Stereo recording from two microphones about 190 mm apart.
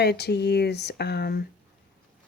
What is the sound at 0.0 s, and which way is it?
Speech, 60° left (ahead or behind).